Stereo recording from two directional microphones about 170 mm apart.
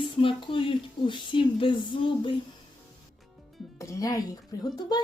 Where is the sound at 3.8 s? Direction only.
20° left (ahead or behind).